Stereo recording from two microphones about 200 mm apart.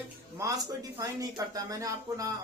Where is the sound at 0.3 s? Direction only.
15° right (ahead or behind).